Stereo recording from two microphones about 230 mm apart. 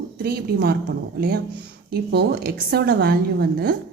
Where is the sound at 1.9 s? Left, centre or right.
Right.